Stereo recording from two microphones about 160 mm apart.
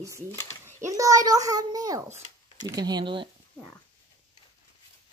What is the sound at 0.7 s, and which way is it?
A child's voice, 20° right (ahead or behind).